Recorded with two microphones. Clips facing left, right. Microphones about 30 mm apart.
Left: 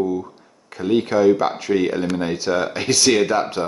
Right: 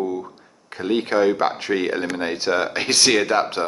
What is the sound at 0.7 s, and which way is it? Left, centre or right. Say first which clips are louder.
Speech: left 2 dB; right.